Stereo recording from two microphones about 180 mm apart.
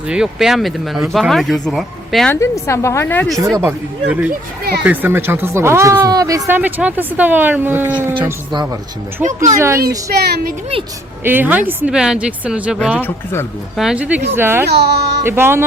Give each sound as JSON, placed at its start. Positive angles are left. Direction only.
{"t": 0.1, "sound": "speech", "side_deg": -5}
{"t": 2.3, "sound": "a woman's voice", "side_deg": 15}
{"t": 3.6, "sound": "speech", "side_deg": -10}
{"t": 9.2, "sound": "speech", "side_deg": -45}
{"t": 9.6, "sound": "speech", "side_deg": -15}
{"t": 10.1, "sound": "speech", "side_deg": -60}
{"t": 11.2, "sound": "speech", "side_deg": -10}
{"t": 14.7, "sound": "speech", "side_deg": -65}
{"t": 15.2, "sound": "speech", "side_deg": -15}